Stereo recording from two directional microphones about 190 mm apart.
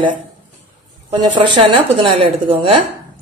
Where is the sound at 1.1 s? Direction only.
25° right (ahead or behind).